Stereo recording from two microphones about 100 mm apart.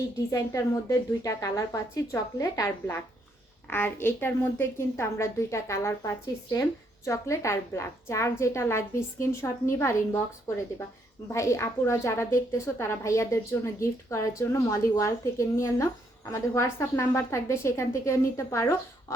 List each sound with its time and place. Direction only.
0.3 s a woman's voice: 35° left (ahead or behind)
11.3 s a woman's voice: 30° left (ahead or behind)